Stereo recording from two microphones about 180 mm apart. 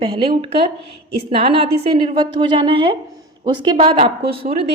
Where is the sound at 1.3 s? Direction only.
30° right (ahead or behind).